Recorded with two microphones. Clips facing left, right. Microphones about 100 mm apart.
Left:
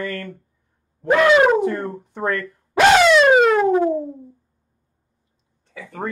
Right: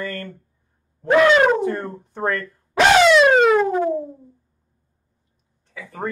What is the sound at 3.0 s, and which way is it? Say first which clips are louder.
Siren: even; centre (ahead or behind).